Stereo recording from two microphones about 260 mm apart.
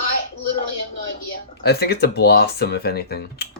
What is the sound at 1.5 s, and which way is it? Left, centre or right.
Speech, left.